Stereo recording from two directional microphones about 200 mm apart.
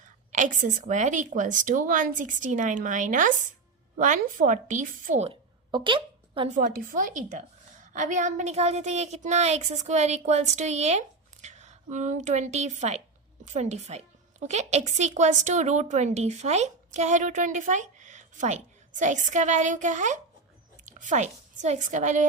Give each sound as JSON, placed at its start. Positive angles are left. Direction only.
{"t": 0.3, "sound": "a woman's voice", "side_deg": -40}
{"t": 5.3, "sound": "a sound", "side_deg": -25}
{"t": 6.6, "sound": "a woman's voice", "side_deg": -45}